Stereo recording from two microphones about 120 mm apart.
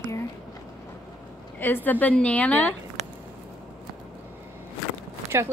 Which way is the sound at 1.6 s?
15° left (ahead or behind).